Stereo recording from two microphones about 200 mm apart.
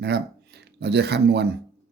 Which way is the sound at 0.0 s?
55° right (ahead or behind).